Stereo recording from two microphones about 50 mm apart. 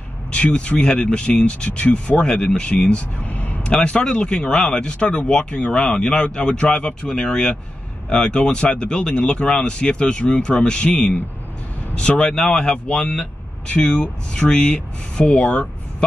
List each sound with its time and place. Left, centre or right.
0.3 s speech: left
3.3 s a sound: left
3.8 s speech: centre